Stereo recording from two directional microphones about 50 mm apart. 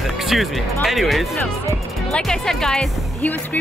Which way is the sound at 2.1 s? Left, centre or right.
Centre.